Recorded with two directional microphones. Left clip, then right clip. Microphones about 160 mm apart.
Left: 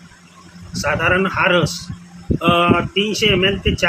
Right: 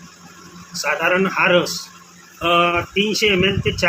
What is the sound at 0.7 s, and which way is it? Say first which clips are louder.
A man's voice: left 1 dB; 10° left (ahead or behind).